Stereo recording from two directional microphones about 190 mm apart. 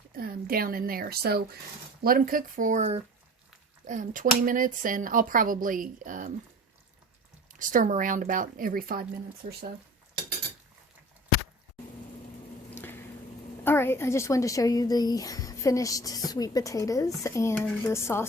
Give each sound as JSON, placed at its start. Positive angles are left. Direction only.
{"t": 0.1, "sound": "a woman's voice", "side_deg": -50}
{"t": 7.6, "sound": "speech", "side_deg": -45}
{"t": 12.7, "sound": "squish", "side_deg": 10}
{"t": 13.7, "sound": "a woman's voice", "side_deg": 10}